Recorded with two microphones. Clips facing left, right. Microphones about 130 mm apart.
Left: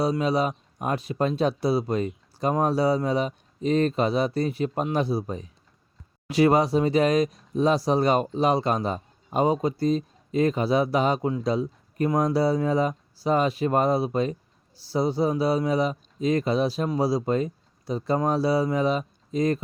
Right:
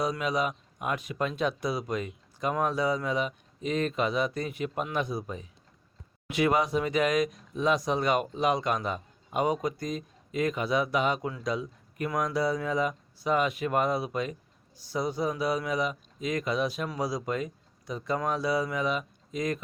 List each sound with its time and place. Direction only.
0.0 s speech: 30° left (ahead or behind)